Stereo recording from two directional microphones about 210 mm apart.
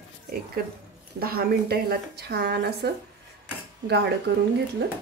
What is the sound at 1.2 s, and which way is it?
A woman's voice, 45° right (ahead or behind).